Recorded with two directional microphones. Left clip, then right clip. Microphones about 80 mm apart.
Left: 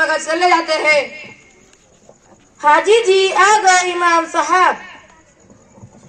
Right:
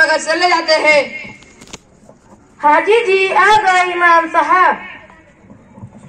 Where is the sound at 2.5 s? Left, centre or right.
Centre.